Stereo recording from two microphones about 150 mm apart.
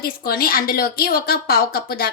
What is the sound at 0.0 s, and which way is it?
A woman's voice, 85° left.